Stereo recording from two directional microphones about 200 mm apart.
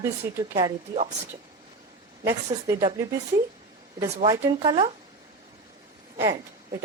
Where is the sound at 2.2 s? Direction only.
15° right (ahead or behind).